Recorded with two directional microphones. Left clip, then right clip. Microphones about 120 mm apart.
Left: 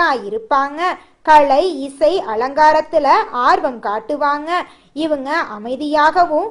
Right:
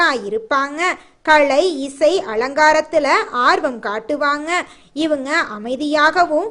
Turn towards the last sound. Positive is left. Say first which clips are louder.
# left 1 dB
turn(degrees=-15)  # may be behind; listen again after turning